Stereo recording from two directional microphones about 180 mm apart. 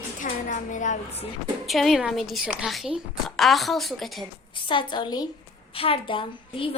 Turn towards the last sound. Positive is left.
turn(degrees=30)  # may be behind; listen again after turning